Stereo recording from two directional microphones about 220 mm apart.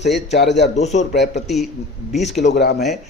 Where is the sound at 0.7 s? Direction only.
30° left (ahead or behind).